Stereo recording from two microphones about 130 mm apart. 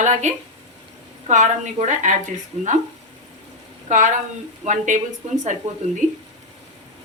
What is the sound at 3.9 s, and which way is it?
A woman's voice, 75° right (ahead or behind).